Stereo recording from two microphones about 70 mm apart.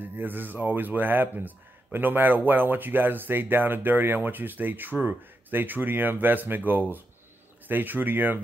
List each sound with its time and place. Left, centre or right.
0.0 s speech: right